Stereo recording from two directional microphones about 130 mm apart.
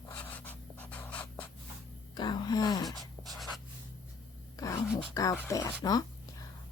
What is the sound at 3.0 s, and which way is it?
Writing, centre (ahead or behind).